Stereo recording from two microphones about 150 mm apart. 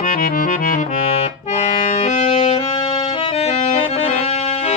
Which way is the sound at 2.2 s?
45° left (ahead or behind).